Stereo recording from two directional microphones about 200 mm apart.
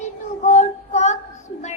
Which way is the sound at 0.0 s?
35° left (ahead or behind).